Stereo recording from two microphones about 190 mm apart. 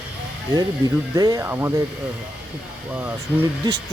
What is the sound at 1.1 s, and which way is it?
Speech, 20° right (ahead or behind).